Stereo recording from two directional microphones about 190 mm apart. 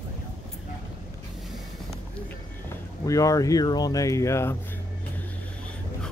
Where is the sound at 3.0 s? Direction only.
15° left (ahead or behind).